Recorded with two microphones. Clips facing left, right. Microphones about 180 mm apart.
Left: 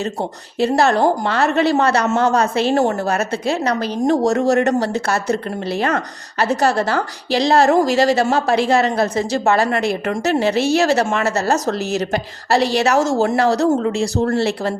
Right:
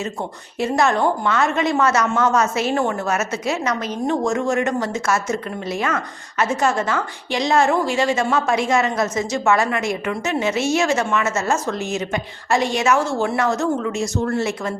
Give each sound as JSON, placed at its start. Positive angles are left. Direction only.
{"t": 0.6, "sound": "a woman's voice", "side_deg": 35}